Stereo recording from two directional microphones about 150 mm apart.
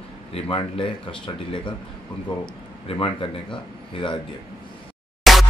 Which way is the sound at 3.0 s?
35° left (ahead or behind).